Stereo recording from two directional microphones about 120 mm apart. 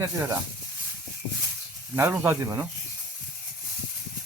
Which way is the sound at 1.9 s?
15° right (ahead or behind).